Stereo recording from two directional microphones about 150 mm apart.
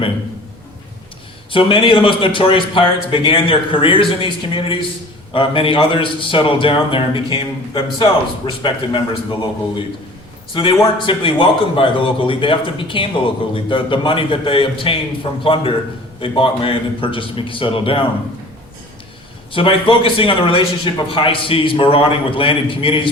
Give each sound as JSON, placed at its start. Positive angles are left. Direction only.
{"t": 1.5, "sound": "a man's voice", "side_deg": 35}
{"t": 19.5, "sound": "a man's voice", "side_deg": 35}